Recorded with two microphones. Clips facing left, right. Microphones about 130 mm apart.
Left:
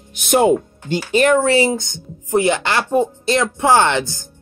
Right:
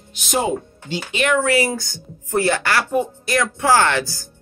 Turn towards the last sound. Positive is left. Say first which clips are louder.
# left 2 dB
turn(degrees=20)  # may be behind; listen again after turning